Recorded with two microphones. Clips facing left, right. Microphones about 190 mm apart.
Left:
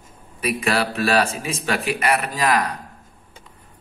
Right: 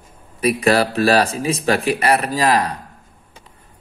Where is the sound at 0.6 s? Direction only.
40° right (ahead or behind).